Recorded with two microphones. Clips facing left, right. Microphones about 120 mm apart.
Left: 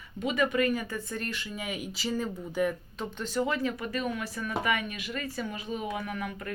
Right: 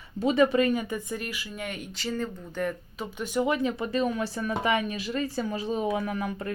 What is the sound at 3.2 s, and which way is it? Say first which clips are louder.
Speech: right 4 dB; 15° right (ahead or behind).